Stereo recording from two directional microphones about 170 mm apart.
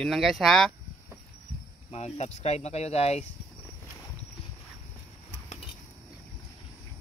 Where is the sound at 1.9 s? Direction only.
40° left (ahead or behind).